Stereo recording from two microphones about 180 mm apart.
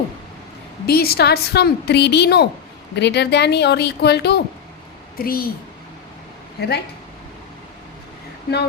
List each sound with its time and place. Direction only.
0.9 s a woman's voice: 60° left (ahead or behind)
5.1 s a woman's voice: 55° left (ahead or behind)
6.6 s speech: 65° left (ahead or behind)